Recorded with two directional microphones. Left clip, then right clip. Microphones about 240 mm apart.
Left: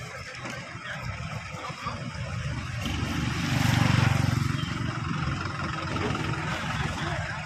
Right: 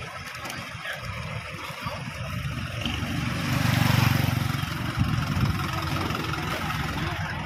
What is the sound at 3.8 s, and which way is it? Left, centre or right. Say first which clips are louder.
Vehicle: right 3 dB; right.